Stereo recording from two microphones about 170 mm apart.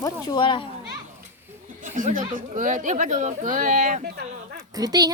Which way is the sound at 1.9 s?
50° right (ahead or behind).